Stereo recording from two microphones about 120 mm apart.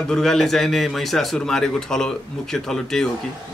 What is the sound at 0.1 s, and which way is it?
Speech, 5° left (ahead or behind).